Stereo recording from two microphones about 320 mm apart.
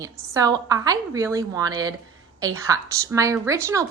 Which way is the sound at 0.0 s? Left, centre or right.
Centre.